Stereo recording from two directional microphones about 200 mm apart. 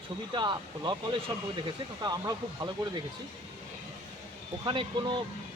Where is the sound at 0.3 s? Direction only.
20° right (ahead or behind).